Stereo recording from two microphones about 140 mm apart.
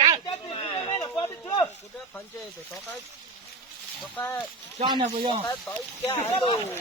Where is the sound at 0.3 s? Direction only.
35° left (ahead or behind).